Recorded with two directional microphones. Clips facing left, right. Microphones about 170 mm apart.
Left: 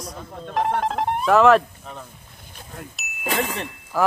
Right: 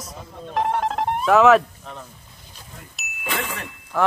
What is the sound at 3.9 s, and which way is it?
Speech, 5° left (ahead or behind).